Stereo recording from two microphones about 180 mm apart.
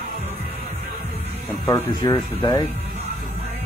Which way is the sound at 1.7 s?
20° left (ahead or behind).